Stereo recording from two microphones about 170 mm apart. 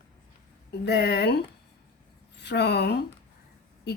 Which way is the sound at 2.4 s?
80° left.